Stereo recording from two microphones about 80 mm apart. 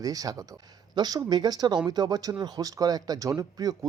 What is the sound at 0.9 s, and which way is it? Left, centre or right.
Speech, right.